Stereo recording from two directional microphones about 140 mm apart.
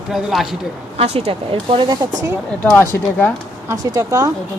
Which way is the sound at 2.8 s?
15° left (ahead or behind).